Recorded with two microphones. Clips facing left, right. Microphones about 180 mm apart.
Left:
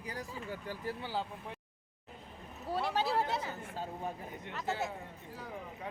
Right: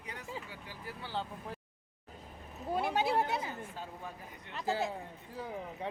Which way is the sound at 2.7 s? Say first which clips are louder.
Right 1 dB; 15° right (ahead or behind).